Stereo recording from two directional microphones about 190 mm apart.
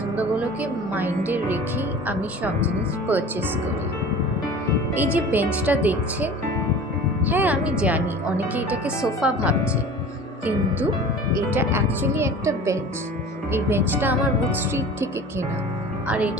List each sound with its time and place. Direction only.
0.1 s music: 10° right (ahead or behind)
2.6 s speech: 10° right (ahead or behind)
4.9 s a woman's voice: 10° right (ahead or behind)
11.5 s speech: 10° right (ahead or behind)